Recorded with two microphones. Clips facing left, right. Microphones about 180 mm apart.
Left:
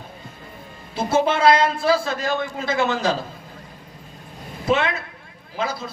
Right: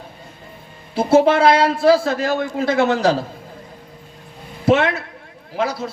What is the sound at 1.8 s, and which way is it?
A man's voice, 65° right (ahead or behind).